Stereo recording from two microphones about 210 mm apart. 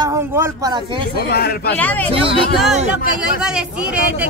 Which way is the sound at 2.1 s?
25° right (ahead or behind).